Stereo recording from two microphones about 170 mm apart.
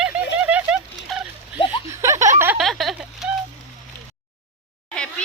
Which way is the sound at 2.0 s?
15° right (ahead or behind).